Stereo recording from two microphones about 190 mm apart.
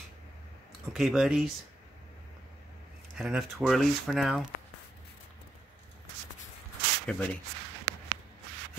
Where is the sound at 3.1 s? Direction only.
5° right (ahead or behind).